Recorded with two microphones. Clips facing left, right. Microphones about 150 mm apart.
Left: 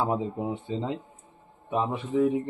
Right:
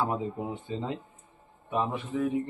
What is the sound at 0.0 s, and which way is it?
Speech, 20° left (ahead or behind).